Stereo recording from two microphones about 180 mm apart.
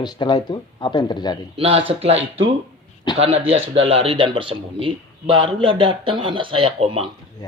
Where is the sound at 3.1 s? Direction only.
25° left (ahead or behind).